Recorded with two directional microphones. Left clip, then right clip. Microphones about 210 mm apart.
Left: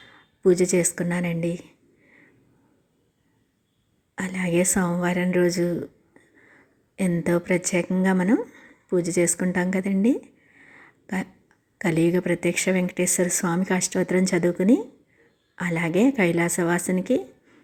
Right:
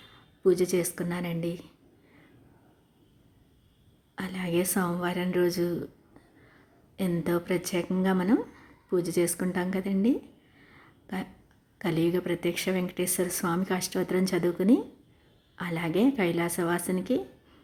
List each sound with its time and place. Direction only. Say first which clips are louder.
0.4 s a woman's voice: left 5 dB; 20° left (ahead or behind)
4.1 s a woman's voice: left 5 dB; 20° left (ahead or behind)
6.9 s a woman's voice: left 5 dB; 20° left (ahead or behind)
10.6 s a sound: left 8 dB; 20° left (ahead or behind)
11.8 s a woman's voice: left 5 dB; 20° left (ahead or behind)